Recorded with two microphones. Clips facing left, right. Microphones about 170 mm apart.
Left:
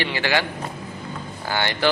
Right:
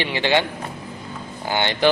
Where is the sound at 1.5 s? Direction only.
20° right (ahead or behind).